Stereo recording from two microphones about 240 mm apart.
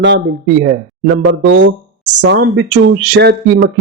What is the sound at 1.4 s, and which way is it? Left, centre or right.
Speech, right.